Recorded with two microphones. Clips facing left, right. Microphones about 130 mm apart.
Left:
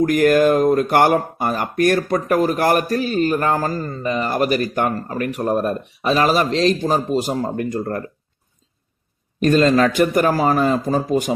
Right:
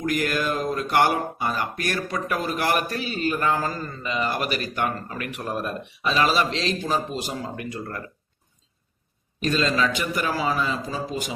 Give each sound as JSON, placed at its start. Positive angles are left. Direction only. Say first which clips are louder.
{"t": 0.0, "sound": "speech", "louder": "left 11 dB", "side_deg": 50}
{"t": 9.4, "sound": "speech", "louder": "left 9 dB", "side_deg": 50}